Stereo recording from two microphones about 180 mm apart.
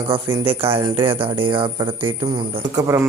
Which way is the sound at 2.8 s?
15° right (ahead or behind).